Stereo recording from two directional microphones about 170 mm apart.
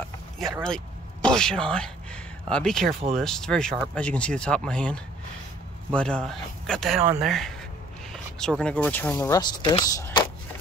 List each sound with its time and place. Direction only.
0.4 s speech: 5° left (ahead or behind)
9.1 s speech: 20° left (ahead or behind)